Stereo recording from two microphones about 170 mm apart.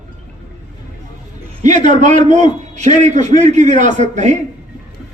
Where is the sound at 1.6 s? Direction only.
45° right (ahead or behind).